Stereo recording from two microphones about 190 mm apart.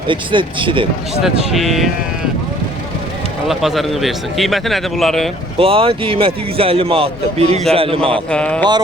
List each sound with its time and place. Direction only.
0.1 s speech: 25° right (ahead or behind)
1.2 s a man's voice: centre (ahead or behind)
3.4 s a man's voice: centre (ahead or behind)
5.5 s speech: 30° right (ahead or behind)
8.3 s a man's voice: 5° left (ahead or behind)